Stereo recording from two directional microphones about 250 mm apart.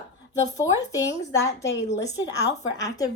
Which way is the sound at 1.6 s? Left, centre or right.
Left.